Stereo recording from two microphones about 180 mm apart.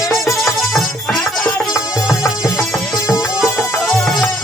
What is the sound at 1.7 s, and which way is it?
Music, 20° left (ahead or behind).